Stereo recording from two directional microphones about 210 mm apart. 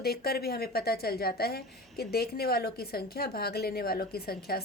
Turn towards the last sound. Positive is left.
turn(degrees=45)  # may be behind; listen again after turning